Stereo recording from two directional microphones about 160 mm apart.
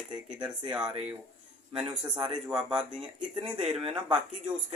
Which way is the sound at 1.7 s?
5° right (ahead or behind).